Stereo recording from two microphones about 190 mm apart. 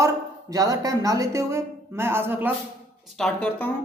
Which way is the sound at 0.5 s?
20° right (ahead or behind).